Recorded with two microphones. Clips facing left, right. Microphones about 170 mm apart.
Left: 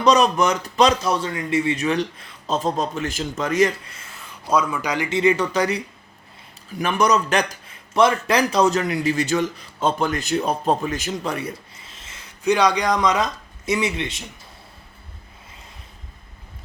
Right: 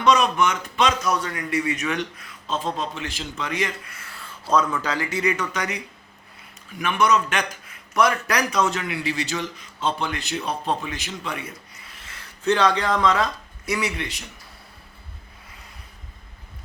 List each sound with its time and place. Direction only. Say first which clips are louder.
0.0 s a man's voice: left 3 dB; 35° left (ahead or behind)
2.5 s a man's voice: left 4 dB; 40° left (ahead or behind)
3.8 s speech: even; 25° left (ahead or behind)
5.0 s a man's voice: left 6 dB; 25° left (ahead or behind)
11.8 s speech: left 1 dB; 25° left (ahead or behind)